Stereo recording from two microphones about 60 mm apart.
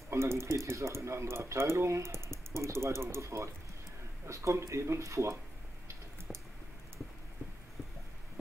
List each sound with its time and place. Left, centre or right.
0.1 s speech: right